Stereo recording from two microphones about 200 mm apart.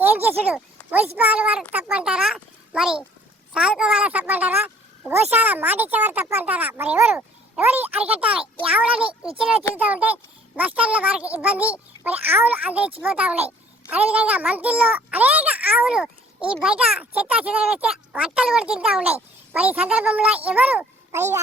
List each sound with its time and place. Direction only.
0.0 s a child's voice: 10° right (ahead or behind)
9.0 s a child's voice: 25° right (ahead or behind)
9.7 s a child's voice: 10° right (ahead or behind)